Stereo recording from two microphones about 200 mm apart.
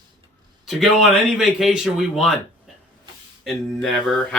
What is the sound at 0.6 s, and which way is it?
Speech, centre (ahead or behind).